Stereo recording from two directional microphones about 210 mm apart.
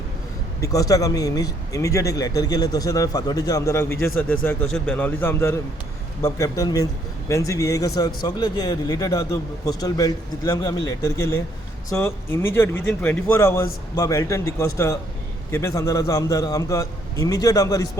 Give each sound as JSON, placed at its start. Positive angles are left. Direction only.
{"t": 0.6, "sound": "speech", "side_deg": 15}